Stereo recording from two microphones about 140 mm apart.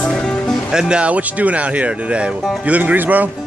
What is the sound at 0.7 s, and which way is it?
Speech, 5° right (ahead or behind).